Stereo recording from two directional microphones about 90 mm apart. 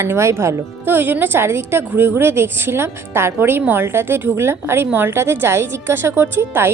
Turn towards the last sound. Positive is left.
turn(degrees=-25)  # may be behind; listen again after turning